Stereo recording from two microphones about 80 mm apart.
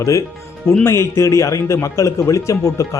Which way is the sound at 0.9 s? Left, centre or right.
Left.